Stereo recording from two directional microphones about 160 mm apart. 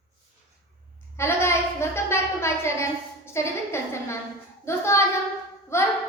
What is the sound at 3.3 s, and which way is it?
A woman's voice, 15° left (ahead or behind).